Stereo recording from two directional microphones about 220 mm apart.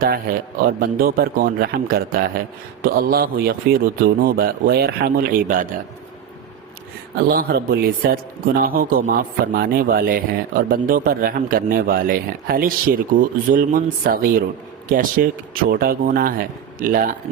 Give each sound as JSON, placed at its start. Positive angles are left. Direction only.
{"t": 0.8, "sound": "a man's voice", "side_deg": -40}
{"t": 7.2, "sound": "a man's voice", "side_deg": -45}